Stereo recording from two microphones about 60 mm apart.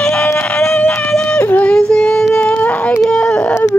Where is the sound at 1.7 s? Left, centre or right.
Centre.